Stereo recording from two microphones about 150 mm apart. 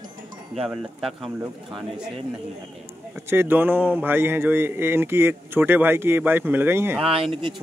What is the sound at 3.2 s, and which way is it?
Speech, 15° right (ahead or behind).